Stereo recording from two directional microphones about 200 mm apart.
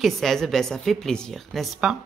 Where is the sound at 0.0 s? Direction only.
Centre (ahead or behind).